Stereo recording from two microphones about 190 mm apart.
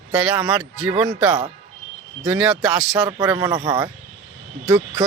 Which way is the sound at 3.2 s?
15° right (ahead or behind).